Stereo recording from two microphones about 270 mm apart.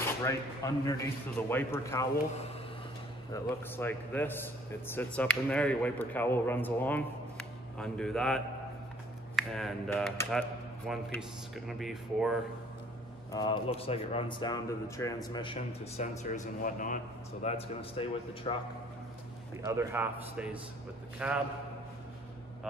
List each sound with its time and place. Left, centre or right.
0.0 s a man's voice: centre
3.3 s a man's voice: centre
13.3 s a man's voice: centre
19.6 s a man's voice: centre